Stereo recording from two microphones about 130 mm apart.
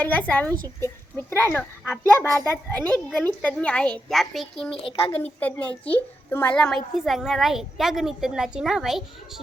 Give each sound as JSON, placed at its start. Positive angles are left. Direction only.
{"t": 0.0, "sound": "a woman's voice", "side_deg": 15}
{"t": 4.8, "sound": "speech", "side_deg": 45}
{"t": 5.1, "sound": "a child's voice", "side_deg": 10}